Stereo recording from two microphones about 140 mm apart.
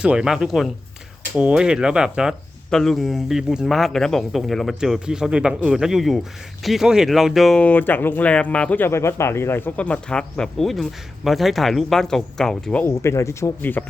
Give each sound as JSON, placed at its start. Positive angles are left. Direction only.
{"t": 0.0, "sound": "speech", "side_deg": -5}
{"t": 7.6, "sound": "speech", "side_deg": 10}
{"t": 12.8, "sound": "speech", "side_deg": 20}